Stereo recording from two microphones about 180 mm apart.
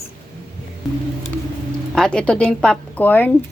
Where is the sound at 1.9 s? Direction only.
5° left (ahead or behind).